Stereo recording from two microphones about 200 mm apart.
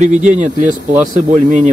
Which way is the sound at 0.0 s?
35° right (ahead or behind).